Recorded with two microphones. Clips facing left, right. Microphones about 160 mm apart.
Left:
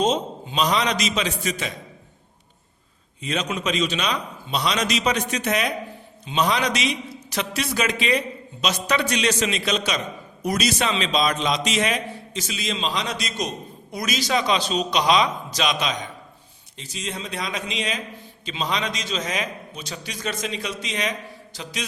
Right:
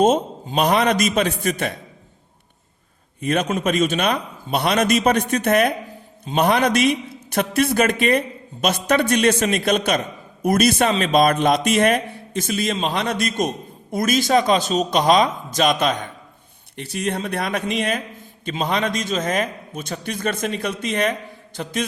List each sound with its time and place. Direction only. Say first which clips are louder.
0.0 s a man's voice: right 5 dB; 50° right (ahead or behind)
3.2 s a man's voice: right 6 dB; 55° right (ahead or behind)